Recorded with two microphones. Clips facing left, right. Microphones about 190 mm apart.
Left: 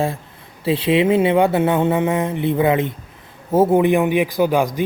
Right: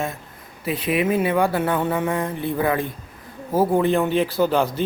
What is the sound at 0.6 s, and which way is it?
Speech, 30° left (ahead or behind).